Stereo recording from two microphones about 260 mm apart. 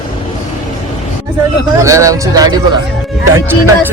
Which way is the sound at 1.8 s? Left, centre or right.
Centre.